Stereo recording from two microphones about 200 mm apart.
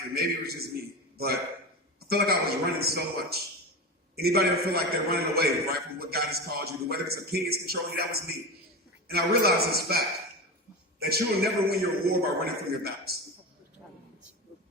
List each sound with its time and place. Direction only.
0.1 s a man's voice: 50° right (ahead or behind)
2.0 s a man's voice: 50° right (ahead or behind)